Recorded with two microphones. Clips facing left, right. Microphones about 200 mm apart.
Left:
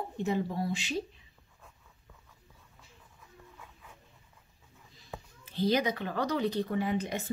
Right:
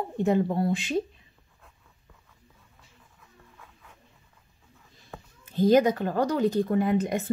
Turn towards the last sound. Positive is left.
turn(degrees=-50)  # may be behind; listen again after turning